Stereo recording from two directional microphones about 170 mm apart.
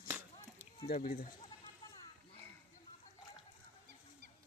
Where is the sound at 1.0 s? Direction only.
60° left (ahead or behind).